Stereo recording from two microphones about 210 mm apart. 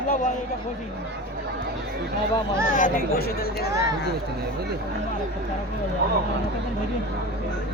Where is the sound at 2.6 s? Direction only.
40° left (ahead or behind).